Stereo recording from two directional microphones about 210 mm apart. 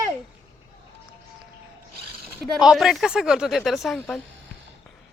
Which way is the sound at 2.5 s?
Centre (ahead or behind).